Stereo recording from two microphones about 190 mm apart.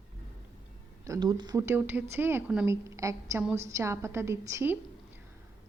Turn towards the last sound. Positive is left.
turn(degrees=-15)  # may be behind; listen again after turning